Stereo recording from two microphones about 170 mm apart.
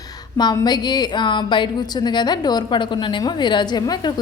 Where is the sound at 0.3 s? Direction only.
25° left (ahead or behind).